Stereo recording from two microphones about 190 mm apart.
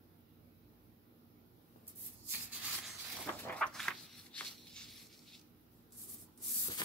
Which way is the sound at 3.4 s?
5° left (ahead or behind).